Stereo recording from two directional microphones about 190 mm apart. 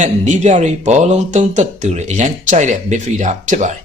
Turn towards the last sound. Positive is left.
turn(degrees=-40)  # may be behind; listen again after turning